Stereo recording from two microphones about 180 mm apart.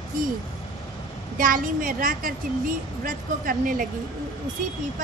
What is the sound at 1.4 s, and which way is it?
A woman's voice, 50° right (ahead or behind).